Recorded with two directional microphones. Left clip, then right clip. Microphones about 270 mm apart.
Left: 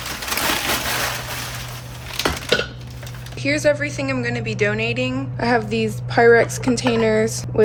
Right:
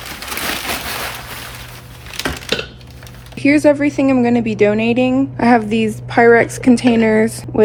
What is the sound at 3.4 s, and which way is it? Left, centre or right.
A woman's voice, right.